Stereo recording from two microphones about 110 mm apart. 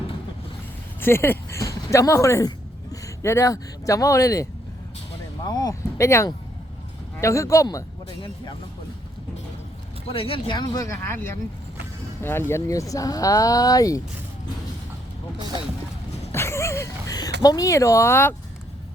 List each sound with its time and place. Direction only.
1.0 s speech: 20° left (ahead or behind)
5.5 s speech: 40° left (ahead or behind)
6.0 s speech: 25° left (ahead or behind)
10.1 s speech: 55° left (ahead or behind); by 14.0 s 35° left (ahead or behind)
16.3 s a sound: 25° left (ahead or behind)
17.2 s speech: 35° left (ahead or behind)